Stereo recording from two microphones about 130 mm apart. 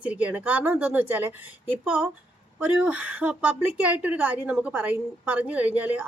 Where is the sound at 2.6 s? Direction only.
10° right (ahead or behind).